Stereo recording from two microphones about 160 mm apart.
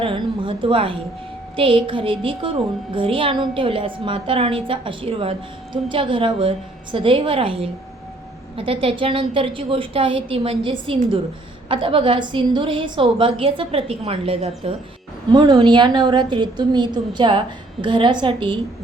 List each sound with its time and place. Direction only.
0.0 s a woman's voice: 30° right (ahead or behind)